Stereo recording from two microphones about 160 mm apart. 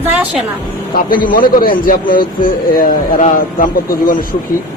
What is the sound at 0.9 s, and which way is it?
A man's voice, 65° left (ahead or behind).